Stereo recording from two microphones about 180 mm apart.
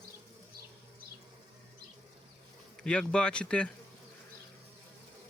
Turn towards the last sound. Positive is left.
turn(degrees=5)  # may be behind; listen again after turning